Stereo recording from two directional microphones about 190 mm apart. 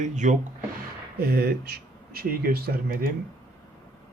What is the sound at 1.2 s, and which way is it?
Speech, 55° right (ahead or behind).